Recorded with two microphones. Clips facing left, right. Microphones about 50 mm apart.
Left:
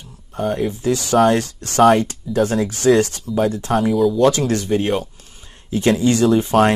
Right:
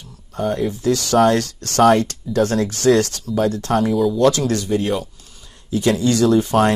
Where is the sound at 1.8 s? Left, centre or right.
Centre.